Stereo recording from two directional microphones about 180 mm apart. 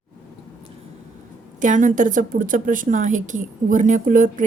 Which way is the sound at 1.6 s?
45° right (ahead or behind).